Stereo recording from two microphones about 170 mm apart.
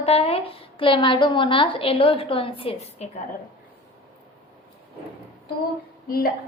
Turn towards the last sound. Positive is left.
turn(degrees=60)  # may be behind; listen again after turning